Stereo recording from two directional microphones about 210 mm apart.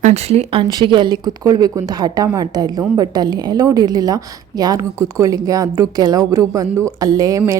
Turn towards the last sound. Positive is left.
turn(degrees=-15)  # may be behind; listen again after turning